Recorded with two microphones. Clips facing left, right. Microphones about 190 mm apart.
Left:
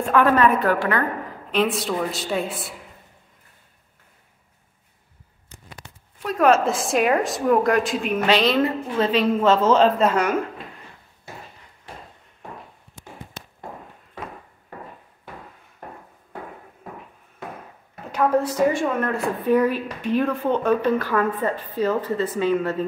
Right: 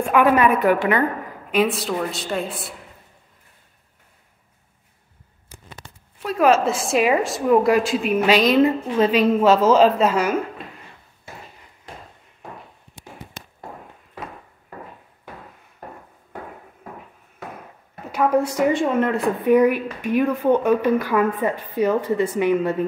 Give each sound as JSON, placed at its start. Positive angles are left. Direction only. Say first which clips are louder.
{"t": 0.1, "sound": "a woman's voice", "louder": "right 1 dB", "side_deg": -10}
{"t": 1.5, "sound": "a woman's voice", "louder": "right 2 dB", "side_deg": -5}
{"t": 6.2, "sound": "a woman's voice", "louder": "right 1 dB", "side_deg": 0}
{"t": 18.1, "sound": "a woman's voice", "louder": "right 1 dB", "side_deg": -10}